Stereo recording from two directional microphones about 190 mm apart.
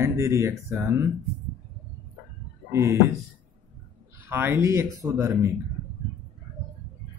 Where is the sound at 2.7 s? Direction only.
15° right (ahead or behind).